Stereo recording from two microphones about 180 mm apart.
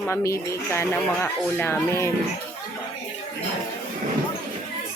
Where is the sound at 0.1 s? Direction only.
15° left (ahead or behind).